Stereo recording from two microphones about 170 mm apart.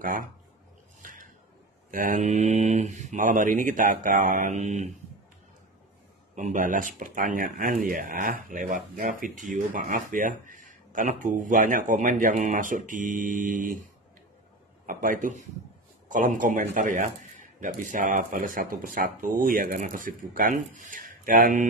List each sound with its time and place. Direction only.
0.0 s speech: 55° right (ahead or behind)
1.0 s a sound: 50° right (ahead or behind)
1.9 s speech: 50° right (ahead or behind)
6.3 s speech: 50° right (ahead or behind)
14.9 s speech: 50° right (ahead or behind)